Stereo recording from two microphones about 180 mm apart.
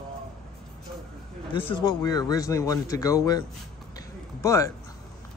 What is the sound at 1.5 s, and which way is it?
A man's voice, 30° left (ahead or behind).